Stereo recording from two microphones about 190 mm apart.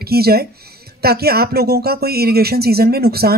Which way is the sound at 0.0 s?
55° right (ahead or behind).